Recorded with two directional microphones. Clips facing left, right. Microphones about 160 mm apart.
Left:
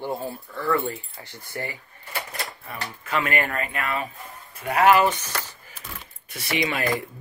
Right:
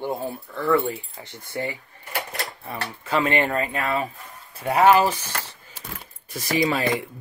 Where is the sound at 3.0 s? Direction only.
30° right (ahead or behind).